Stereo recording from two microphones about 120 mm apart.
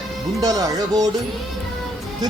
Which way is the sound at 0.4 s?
30° right (ahead or behind).